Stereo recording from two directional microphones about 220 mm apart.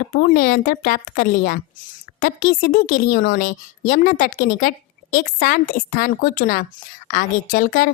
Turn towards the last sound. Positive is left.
turn(degrees=40)  # may be behind; listen again after turning